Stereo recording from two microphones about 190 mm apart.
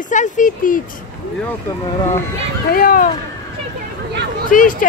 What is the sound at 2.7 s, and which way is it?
Speech, 50° left (ahead or behind).